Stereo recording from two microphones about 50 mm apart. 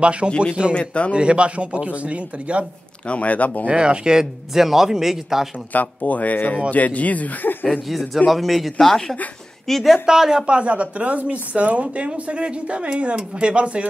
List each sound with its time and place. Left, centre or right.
0.0 s speech: right
0.7 s speech: left
1.1 s speech: right
3.1 s speech: left
3.7 s speech: centre
5.7 s speech: left
8.3 s a man's voice: centre
10.0 s speech: centre
10.4 s speech: right